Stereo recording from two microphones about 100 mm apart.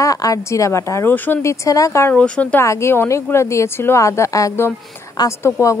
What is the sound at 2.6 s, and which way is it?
Speech, 30° left (ahead or behind).